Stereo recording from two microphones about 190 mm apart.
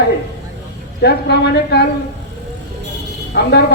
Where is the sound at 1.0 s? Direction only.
60° left (ahead or behind).